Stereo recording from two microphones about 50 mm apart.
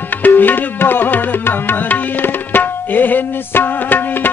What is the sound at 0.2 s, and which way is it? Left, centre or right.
Music, left.